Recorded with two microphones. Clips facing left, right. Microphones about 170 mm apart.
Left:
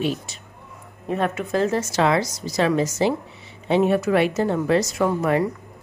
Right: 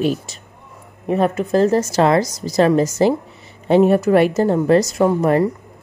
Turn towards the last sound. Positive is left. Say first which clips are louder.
# right 5 dB
turn(degrees=-35)  # may be behind; listen again after turning